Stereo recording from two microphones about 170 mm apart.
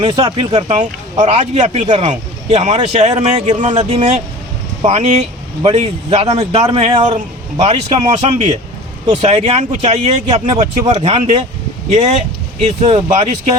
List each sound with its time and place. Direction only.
0.0 s speech: 30° right (ahead or behind)